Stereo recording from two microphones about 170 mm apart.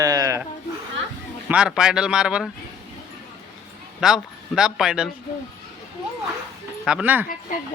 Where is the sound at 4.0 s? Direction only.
5° right (ahead or behind).